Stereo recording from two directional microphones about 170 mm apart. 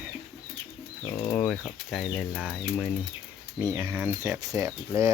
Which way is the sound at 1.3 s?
5° left (ahead or behind).